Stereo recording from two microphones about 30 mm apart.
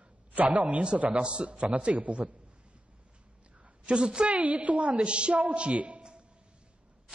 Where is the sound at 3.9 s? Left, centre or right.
Right.